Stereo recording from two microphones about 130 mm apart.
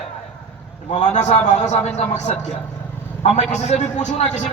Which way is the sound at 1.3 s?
60° left (ahead or behind).